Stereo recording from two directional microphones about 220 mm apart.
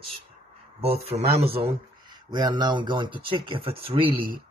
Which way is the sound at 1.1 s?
25° right (ahead or behind).